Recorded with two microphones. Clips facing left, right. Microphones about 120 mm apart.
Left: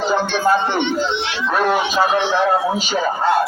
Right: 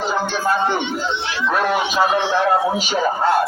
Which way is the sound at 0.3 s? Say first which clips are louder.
Left 2 dB; 70° left (ahead or behind).